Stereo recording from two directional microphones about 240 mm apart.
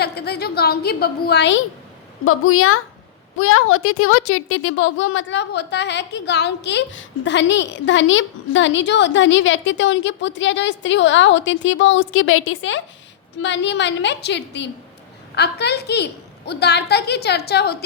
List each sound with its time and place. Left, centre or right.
0.0 s a woman's voice: left
2.2 s a woman's voice: left